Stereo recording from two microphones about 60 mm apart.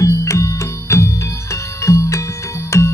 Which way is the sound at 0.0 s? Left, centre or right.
Left.